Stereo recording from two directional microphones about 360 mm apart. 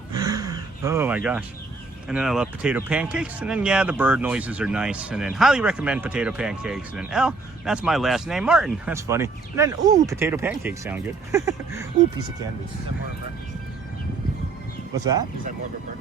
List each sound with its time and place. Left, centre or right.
0.1 s gasp: centre
2.0 s speech: centre
14.9 s speech: centre